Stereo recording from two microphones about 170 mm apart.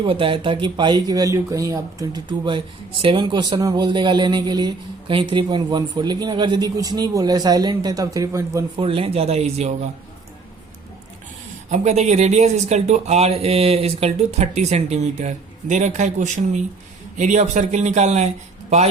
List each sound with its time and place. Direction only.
0.0 s speech: 30° right (ahead or behind)
8.8 s speech: 35° right (ahead or behind)
11.7 s a man's voice: 40° right (ahead or behind)